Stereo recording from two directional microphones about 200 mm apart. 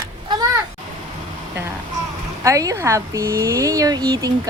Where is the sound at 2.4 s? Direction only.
15° right (ahead or behind).